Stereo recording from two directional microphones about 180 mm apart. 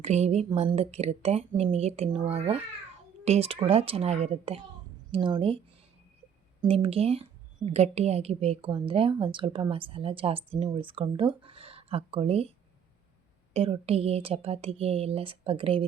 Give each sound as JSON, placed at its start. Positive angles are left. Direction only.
{"t": 0.0, "sound": "a woman's voice", "side_deg": -35}
{"t": 6.6, "sound": "a woman's voice", "side_deg": -30}